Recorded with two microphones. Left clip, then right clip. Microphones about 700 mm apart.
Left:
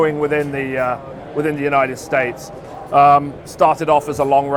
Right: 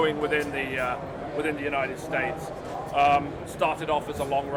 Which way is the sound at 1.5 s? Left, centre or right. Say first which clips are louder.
Left 13 dB; left.